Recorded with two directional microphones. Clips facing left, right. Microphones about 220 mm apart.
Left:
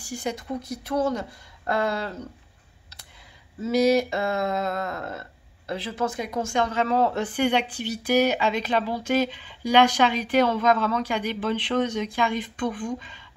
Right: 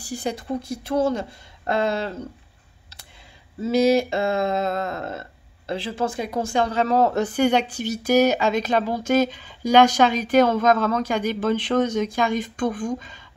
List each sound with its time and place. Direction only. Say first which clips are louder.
0.0 s speech: right 2 dB; 35° right (ahead or behind)
3.6 s speech: right 2 dB; 25° right (ahead or behind); by 13.2 s 45° right (ahead or behind)